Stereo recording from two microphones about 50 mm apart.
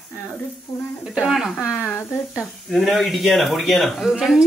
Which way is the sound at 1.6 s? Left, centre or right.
Left.